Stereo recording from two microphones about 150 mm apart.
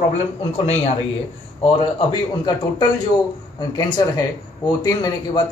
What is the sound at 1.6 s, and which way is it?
Speech, 30° left (ahead or behind).